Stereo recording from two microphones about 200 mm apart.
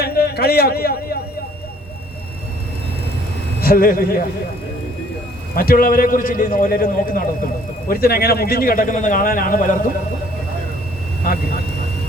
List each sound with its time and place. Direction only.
0.0 s a sound: 50° left (ahead or behind)
3.6 s a man's voice: 45° left (ahead or behind)
5.5 s a man's voice: 45° left (ahead or behind)